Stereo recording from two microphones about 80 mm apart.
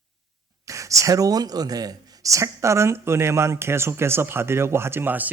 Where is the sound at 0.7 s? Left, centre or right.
Right.